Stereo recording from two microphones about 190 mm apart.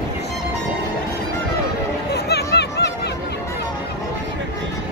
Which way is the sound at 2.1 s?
60° left (ahead or behind).